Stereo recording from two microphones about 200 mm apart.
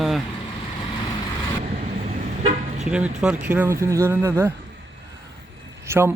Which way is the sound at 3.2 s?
5° right (ahead or behind).